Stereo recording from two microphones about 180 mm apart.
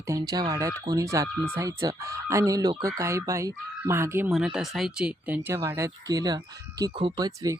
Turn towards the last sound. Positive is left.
turn(degrees=-20)  # may be behind; listen again after turning